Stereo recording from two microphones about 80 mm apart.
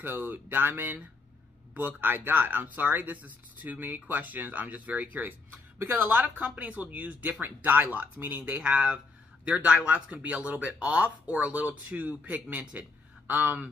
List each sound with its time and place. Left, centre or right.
0.0 s speech: right
8.5 s speech: centre